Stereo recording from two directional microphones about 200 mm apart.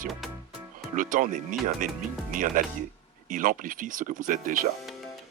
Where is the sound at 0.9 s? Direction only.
40° right (ahead or behind).